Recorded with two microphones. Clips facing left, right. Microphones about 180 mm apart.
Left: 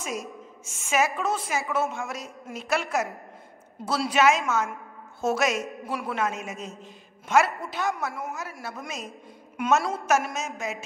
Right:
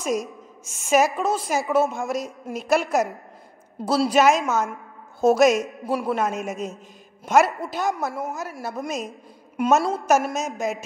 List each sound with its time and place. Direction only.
0.0 s a woman's voice: 40° right (ahead or behind)